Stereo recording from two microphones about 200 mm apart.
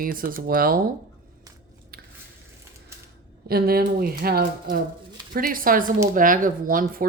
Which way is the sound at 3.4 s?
50° right (ahead or behind).